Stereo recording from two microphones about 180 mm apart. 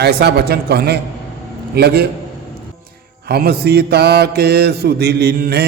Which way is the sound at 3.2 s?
60° right (ahead or behind).